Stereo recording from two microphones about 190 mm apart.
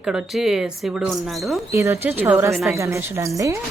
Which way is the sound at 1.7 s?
15° right (ahead or behind).